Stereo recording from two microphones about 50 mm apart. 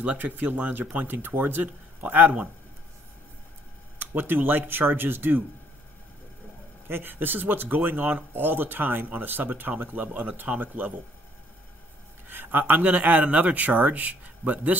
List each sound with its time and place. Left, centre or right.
0.0 s speech: right
4.0 s speech: right
6.9 s speech: right
12.3 s speech: right